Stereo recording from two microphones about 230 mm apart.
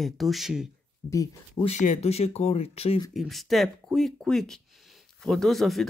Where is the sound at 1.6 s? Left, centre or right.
Left.